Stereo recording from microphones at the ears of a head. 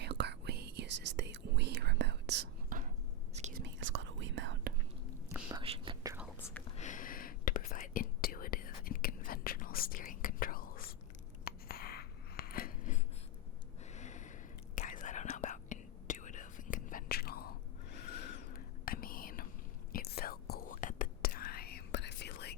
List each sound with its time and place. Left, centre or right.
0.0 s whispering: right
6.7 s whispering: left
11.4 s chewing: left
13.9 s a sound: left
14.8 s whispering: left